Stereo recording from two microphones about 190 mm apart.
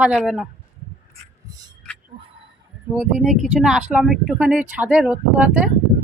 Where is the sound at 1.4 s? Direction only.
20° right (ahead or behind).